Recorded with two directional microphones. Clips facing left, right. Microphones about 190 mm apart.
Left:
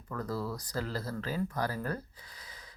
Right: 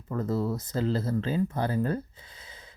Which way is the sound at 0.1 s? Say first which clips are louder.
Right 7 dB; 25° right (ahead or behind).